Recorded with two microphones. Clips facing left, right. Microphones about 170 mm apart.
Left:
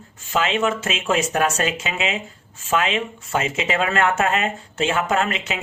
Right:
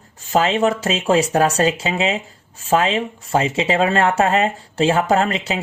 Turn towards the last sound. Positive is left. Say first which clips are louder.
# right 4 dB
turn(degrees=-35)  # may be behind; listen again after turning